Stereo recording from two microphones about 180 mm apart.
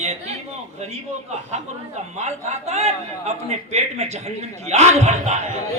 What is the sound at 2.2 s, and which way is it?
A man's voice, 40° right (ahead or behind).